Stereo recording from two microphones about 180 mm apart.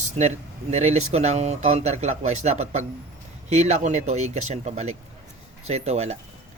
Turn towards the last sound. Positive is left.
turn(degrees=-35)  # may be behind; listen again after turning